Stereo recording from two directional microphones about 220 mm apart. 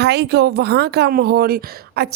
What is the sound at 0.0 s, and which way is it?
A woman's voice, 50° right (ahead or behind).